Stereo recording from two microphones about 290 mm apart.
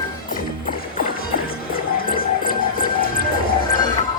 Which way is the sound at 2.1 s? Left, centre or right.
Left.